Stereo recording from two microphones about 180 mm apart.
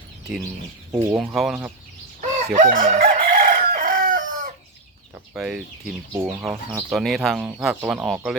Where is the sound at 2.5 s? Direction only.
45° right (ahead or behind).